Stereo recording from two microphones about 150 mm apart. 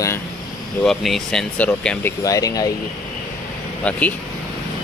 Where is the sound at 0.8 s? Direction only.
Centre (ahead or behind); by 2.7 s 25° left (ahead or behind).